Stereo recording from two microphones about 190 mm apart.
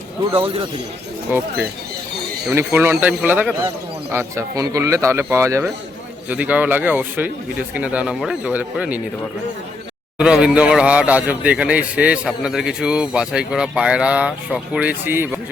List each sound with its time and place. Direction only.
2.5 s a man's voice: 10° right (ahead or behind)
10.2 s a man's voice: 5° right (ahead or behind)